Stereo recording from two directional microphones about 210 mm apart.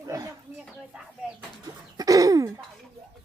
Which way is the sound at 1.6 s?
15° right (ahead or behind).